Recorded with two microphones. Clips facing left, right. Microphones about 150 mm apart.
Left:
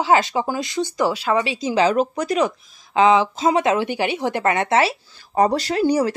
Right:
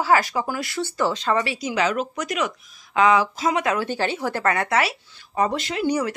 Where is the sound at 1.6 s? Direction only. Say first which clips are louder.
Left 5 dB; 30° left (ahead or behind).